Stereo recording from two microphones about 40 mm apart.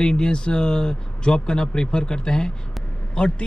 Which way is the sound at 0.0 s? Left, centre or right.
Centre.